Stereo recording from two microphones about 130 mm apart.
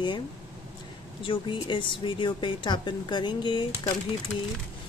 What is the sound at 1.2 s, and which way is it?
A woman's voice, 40° left (ahead or behind).